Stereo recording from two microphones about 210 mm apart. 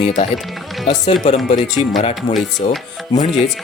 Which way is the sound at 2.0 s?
30° left (ahead or behind).